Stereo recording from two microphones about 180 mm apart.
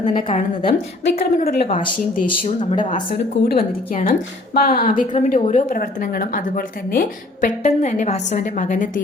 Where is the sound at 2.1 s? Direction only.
50° left (ahead or behind).